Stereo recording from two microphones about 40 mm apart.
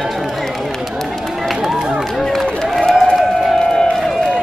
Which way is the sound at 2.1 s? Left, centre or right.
Centre.